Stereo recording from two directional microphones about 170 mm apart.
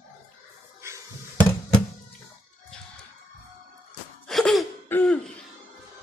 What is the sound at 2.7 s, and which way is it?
Music, 5° left (ahead or behind).